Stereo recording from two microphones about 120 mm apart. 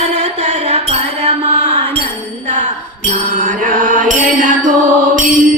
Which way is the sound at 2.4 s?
70° right (ahead or behind).